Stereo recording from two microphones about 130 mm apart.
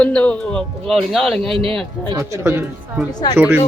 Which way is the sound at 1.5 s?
45° right (ahead or behind).